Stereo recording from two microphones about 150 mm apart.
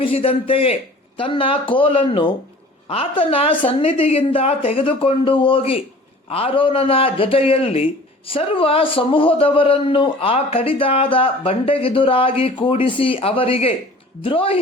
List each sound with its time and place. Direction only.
0.0 s a man's voice: 40° left (ahead or behind)